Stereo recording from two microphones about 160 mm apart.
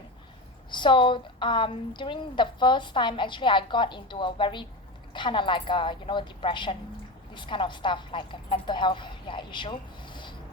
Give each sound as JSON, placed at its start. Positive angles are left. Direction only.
{"t": 0.7, "sound": "a woman's voice", "side_deg": 30}